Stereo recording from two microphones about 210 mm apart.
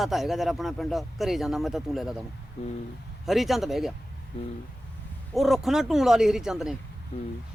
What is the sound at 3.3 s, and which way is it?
Speech, centre (ahead or behind).